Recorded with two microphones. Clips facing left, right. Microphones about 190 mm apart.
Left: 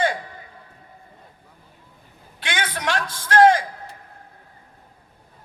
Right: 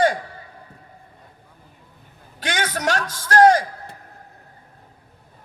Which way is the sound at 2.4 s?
40° right (ahead or behind).